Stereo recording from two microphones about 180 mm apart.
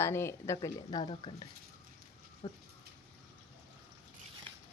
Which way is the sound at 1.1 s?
30° left (ahead or behind).